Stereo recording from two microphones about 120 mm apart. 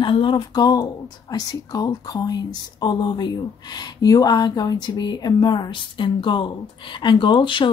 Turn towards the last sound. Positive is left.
turn(degrees=45)  # may be behind; listen again after turning